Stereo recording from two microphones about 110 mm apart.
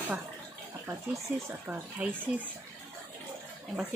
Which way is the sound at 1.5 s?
15° right (ahead or behind).